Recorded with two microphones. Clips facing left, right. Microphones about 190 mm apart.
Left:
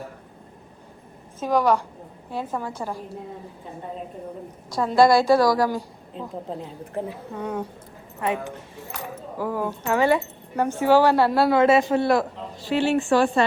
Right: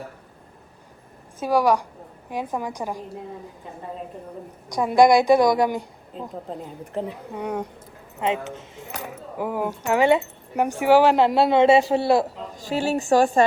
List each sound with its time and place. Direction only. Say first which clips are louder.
1.4 s speech: right 1 dB; 10° right (ahead or behind)
4.7 s speech: right 1 dB; 15° right (ahead or behind)
6.1 s a woman's voice: left 1 dB; centre (ahead or behind)
6.9 s speech: right 1 dB; 15° right (ahead or behind); by 12.3 s 30° right (ahead or behind)
12.5 s a woman's voice: left 2 dB; 40° right (ahead or behind)